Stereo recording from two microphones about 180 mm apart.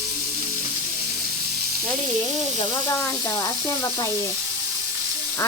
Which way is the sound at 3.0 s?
10° left (ahead or behind).